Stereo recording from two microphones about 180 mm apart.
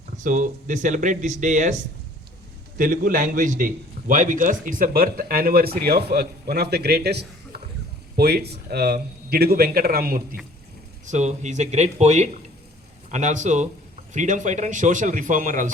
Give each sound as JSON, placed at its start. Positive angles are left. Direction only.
{"t": 0.2, "sound": "speech", "side_deg": -45}
{"t": 2.7, "sound": "a man's voice", "side_deg": -50}
{"t": 11.0, "sound": "speech", "side_deg": -40}